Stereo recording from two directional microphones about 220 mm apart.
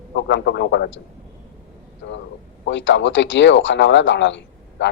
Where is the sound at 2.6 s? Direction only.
55° left (ahead or behind).